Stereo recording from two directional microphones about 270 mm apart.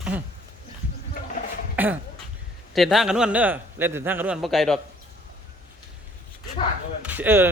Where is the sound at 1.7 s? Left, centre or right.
Centre.